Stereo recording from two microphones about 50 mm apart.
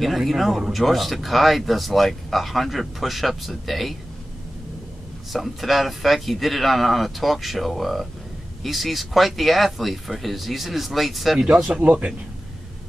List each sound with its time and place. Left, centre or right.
0.0 s speech: centre
5.3 s speech: centre
11.4 s speech: right